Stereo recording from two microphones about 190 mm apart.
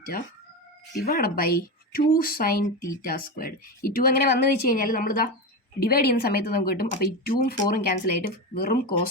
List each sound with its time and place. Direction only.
0.1 s speech: 50° left (ahead or behind)